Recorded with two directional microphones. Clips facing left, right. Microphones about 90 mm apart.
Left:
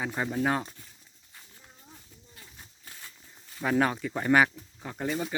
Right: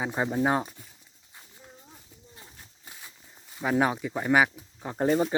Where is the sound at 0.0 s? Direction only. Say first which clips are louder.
Right 3 dB; 20° right (ahead or behind).